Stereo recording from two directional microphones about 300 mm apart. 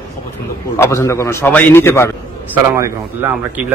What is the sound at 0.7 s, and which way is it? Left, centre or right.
A man's voice, centre.